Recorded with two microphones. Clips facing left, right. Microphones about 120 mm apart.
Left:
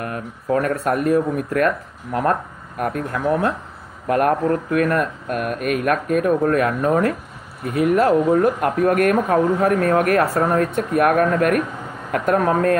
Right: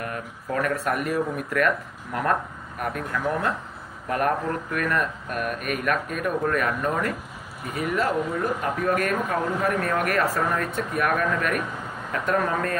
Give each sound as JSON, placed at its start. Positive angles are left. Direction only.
{"t": 0.0, "sound": "speech", "side_deg": 45}
{"t": 2.8, "sound": "speech", "side_deg": 40}